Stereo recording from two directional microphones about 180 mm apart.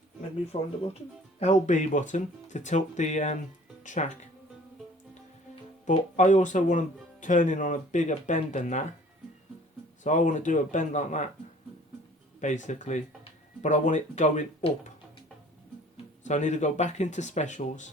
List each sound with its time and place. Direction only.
0.5 s speech: 35° left (ahead or behind)
5.8 s speech: 40° left (ahead or behind)
10.0 s speech: 40° left (ahead or behind)
12.4 s speech: 40° left (ahead or behind)
16.2 s speech: 40° left (ahead or behind)